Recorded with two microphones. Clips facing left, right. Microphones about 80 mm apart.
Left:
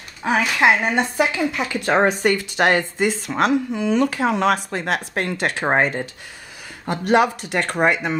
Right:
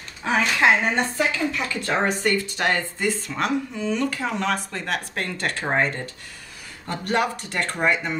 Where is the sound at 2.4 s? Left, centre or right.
Left.